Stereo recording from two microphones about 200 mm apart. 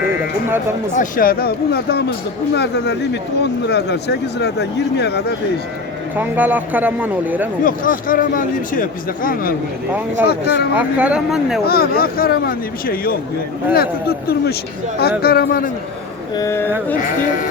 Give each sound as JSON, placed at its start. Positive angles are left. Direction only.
{"t": 0.9, "sound": "speech", "side_deg": 45}
{"t": 6.1, "sound": "speech", "side_deg": -10}
{"t": 7.6, "sound": "speech", "side_deg": 45}
{"t": 10.8, "sound": "speech", "side_deg": -5}
{"t": 11.6, "sound": "speech", "side_deg": 50}
{"t": 16.3, "sound": "speech", "side_deg": 15}